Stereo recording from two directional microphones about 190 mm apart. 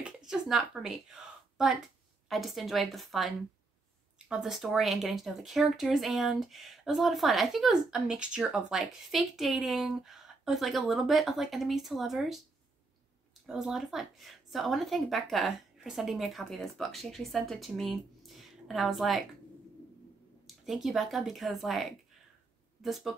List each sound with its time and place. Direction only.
0.0 s speech: 5° right (ahead or behind)
13.5 s speech: centre (ahead or behind)
20.4 s speech: centre (ahead or behind)